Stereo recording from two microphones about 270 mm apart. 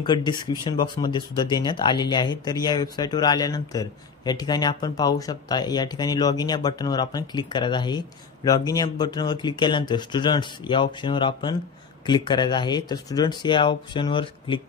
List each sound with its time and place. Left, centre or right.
0.0 s speech: centre